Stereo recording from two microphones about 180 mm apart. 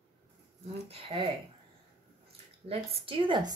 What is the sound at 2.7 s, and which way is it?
Speech, 30° right (ahead or behind).